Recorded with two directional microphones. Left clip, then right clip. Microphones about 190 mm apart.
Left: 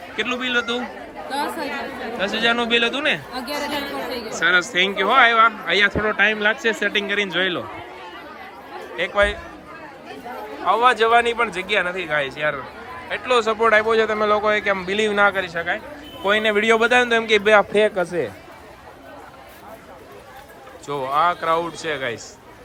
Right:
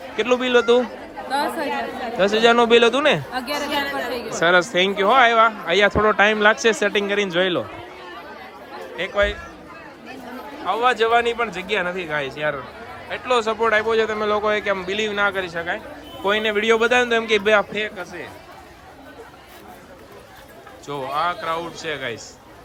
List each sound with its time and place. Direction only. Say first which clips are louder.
0.3 s speech: right 7 dB; 35° right (ahead or behind)
1.3 s a man's voice: right 3 dB; centre (ahead or behind)
2.1 s a man's voice: right 5 dB; 45° right (ahead or behind)
3.3 s a man's voice: right 2 dB; centre (ahead or behind)
4.3 s a man's voice: right 1 dB; 30° right (ahead or behind)
6.1 s speech: right 2 dB; 40° right (ahead or behind)
6.9 s a man's voice: right 1 dB; 20° right (ahead or behind)
9.0 s a man's voice: left 2 dB; 5° right (ahead or behind)
10.7 s a man's voice: left 2 dB; 5° right (ahead or behind)
17.7 s speech: left 8 dB; 10° left (ahead or behind)
20.8 s a man's voice: left 4 dB; 10° right (ahead or behind)